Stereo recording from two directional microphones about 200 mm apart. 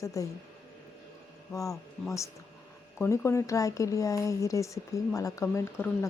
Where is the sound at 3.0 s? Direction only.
15° left (ahead or behind).